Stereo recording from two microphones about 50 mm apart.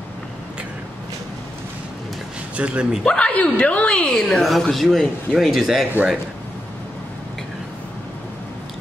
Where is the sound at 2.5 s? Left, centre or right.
Right.